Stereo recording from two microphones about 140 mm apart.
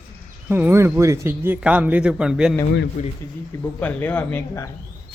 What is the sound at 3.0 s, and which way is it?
Speech, 60° left (ahead or behind).